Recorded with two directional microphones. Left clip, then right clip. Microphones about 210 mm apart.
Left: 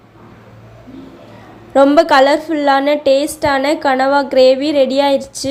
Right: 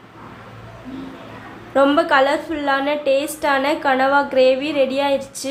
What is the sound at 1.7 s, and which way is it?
A woman's voice, 30° left (ahead or behind).